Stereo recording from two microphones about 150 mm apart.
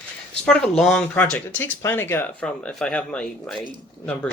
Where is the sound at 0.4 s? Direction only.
5° left (ahead or behind).